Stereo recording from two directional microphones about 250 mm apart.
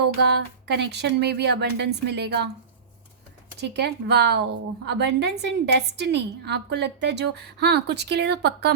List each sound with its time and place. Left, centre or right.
0.2 s speech: right
3.6 s a woman's voice: right